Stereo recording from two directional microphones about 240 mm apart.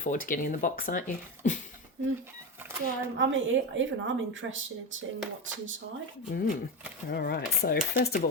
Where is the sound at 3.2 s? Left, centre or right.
Right.